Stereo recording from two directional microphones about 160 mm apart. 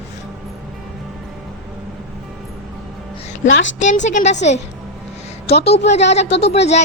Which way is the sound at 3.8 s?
50° left (ahead or behind).